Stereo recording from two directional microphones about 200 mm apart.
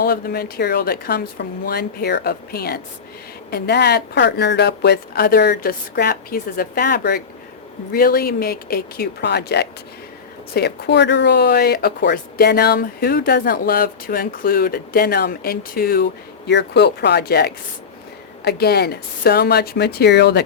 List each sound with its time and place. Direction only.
0.0 s speech: 50° left (ahead or behind)